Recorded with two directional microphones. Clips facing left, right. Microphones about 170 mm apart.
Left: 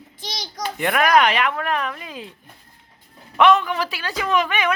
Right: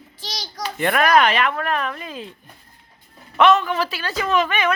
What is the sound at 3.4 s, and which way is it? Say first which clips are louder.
Speech: even; 15° left (ahead or behind).